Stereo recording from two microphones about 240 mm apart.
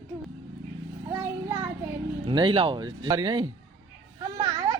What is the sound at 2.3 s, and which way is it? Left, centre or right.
Speech, right.